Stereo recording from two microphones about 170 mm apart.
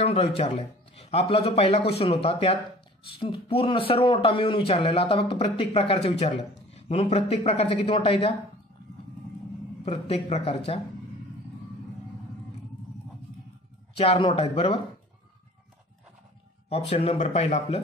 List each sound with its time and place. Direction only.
0.0 s speech: 35° left (ahead or behind)
9.8 s speech: 35° left (ahead or behind)
13.9 s speech: 35° left (ahead or behind)
16.9 s speech: 40° left (ahead or behind)